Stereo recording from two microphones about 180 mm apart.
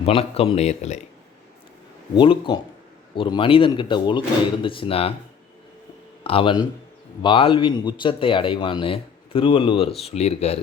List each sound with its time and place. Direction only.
0.0 s speech: 30° left (ahead or behind)
2.1 s a man's voice: 25° left (ahead or behind)
6.2 s a man's voice: 30° left (ahead or behind)